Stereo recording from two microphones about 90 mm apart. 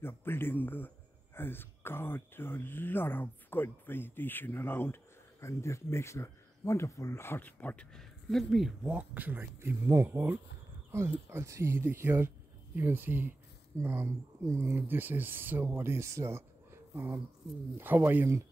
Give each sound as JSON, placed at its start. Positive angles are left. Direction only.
{"t": 0.0, "sound": "a sound", "side_deg": 25}
{"t": 5.4, "sound": "speech", "side_deg": 30}
{"t": 8.9, "sound": "speech", "side_deg": -20}
{"t": 14.6, "sound": "speech", "side_deg": -20}